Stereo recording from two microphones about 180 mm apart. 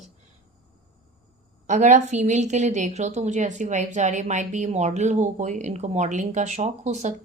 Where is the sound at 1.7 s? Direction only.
40° right (ahead or behind).